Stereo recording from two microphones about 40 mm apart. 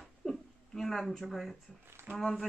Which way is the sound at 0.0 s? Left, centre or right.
Centre.